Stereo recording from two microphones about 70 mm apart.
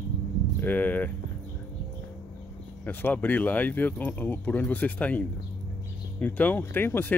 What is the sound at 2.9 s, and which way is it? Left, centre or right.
Speech, left.